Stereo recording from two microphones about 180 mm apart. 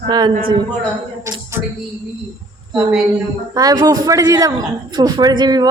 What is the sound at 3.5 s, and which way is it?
A man's voice, 20° right (ahead or behind).